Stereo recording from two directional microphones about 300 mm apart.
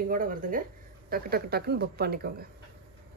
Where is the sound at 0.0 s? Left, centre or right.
Right.